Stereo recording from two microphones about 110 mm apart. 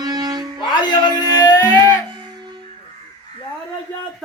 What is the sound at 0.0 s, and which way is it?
Music, 35° right (ahead or behind).